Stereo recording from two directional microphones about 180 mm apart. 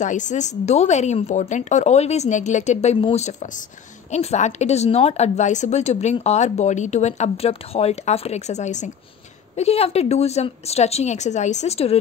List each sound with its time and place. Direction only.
0.0 s speech: 45° left (ahead or behind)